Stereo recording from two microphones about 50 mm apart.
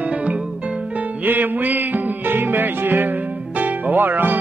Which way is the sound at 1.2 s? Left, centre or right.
Right.